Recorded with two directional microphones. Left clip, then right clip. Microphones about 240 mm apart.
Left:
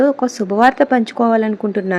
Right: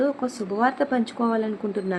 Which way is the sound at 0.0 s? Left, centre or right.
Left.